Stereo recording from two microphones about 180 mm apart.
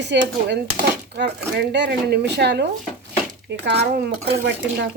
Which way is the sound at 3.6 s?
65° right (ahead or behind).